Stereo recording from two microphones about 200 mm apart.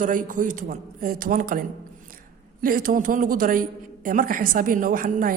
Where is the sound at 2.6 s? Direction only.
45° right (ahead or behind).